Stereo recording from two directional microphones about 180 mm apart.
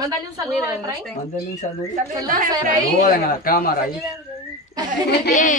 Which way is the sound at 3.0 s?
50° left (ahead or behind).